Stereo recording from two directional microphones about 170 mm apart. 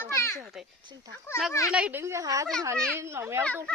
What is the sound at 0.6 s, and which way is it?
Speech, centre (ahead or behind).